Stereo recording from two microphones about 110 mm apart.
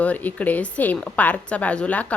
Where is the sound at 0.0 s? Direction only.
15° left (ahead or behind).